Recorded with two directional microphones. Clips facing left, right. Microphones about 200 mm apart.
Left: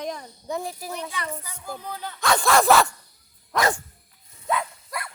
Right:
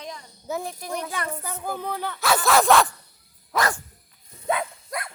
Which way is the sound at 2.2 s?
5° right (ahead or behind).